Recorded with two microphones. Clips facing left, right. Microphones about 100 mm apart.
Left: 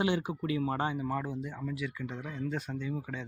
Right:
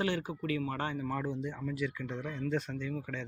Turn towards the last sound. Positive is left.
turn(degrees=10)  # may be behind; listen again after turning